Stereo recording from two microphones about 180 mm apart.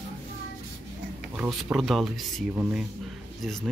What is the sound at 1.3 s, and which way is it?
Speech, 5° right (ahead or behind).